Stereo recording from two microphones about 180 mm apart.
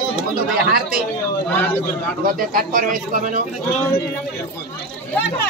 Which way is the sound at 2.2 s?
50° right (ahead or behind).